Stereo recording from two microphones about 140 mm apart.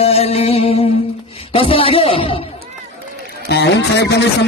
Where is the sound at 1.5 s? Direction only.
40° left (ahead or behind).